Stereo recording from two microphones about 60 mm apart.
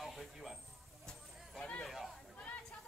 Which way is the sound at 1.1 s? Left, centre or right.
Centre.